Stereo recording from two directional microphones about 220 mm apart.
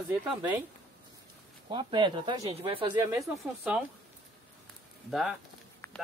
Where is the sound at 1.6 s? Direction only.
20° right (ahead or behind).